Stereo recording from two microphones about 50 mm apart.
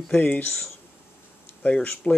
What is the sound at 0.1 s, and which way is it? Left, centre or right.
Speech, left.